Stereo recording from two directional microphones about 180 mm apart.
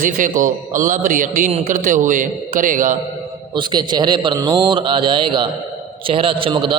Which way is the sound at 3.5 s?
25° right (ahead or behind).